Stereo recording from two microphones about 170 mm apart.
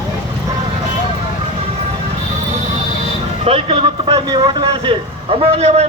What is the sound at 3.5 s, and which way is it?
A man's voice, 30° right (ahead or behind).